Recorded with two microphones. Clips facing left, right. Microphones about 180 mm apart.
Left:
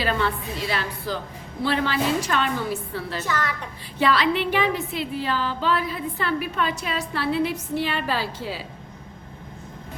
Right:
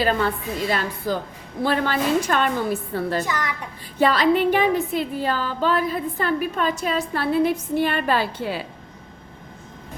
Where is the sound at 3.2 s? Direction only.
15° right (ahead or behind).